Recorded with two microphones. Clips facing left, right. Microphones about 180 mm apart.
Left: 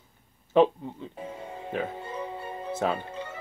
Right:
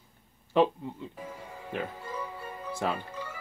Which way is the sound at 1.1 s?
25° left (ahead or behind).